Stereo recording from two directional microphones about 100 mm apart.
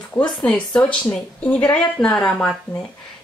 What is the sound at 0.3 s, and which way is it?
A woman's voice, 5° left (ahead or behind).